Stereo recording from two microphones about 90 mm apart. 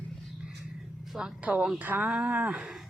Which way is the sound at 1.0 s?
5° right (ahead or behind).